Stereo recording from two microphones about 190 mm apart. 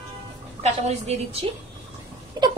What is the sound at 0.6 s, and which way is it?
Speech, 35° right (ahead or behind).